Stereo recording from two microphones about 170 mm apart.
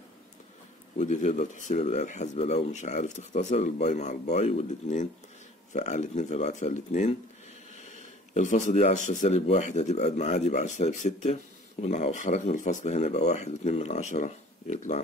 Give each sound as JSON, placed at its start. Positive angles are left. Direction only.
{"t": 0.9, "sound": "speech", "side_deg": 45}
{"t": 8.4, "sound": "speech", "side_deg": 45}